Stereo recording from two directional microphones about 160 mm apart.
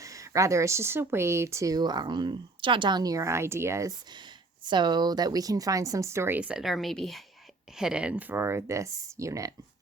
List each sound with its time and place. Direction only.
0.0 s speech: 20° right (ahead or behind)